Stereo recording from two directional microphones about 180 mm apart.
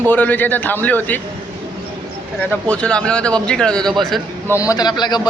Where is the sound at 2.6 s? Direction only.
5° left (ahead or behind).